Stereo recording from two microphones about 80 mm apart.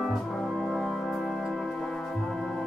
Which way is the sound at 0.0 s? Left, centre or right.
Centre.